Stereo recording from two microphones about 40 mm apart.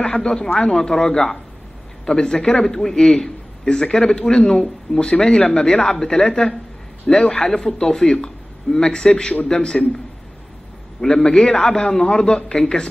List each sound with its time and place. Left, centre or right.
0.0 s a man's voice: left